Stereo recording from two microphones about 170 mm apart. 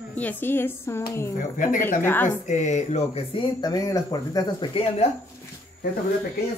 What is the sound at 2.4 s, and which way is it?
Speech, 45° left (ahead or behind).